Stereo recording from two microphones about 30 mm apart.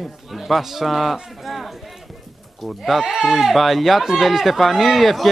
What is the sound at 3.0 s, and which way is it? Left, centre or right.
Speech, right.